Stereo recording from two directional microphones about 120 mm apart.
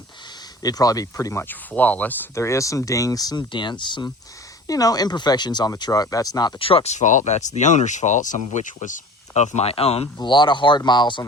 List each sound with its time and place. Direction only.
0.6 s speech: 30° left (ahead or behind); by 2.1 s 15° left (ahead or behind)
2.3 s speech: 25° left (ahead or behind); by 4.1 s 40° left (ahead or behind)
4.6 s speech: 30° left (ahead or behind)
6.6 s speech: 50° left (ahead or behind)
10.2 s speech: 40° left (ahead or behind)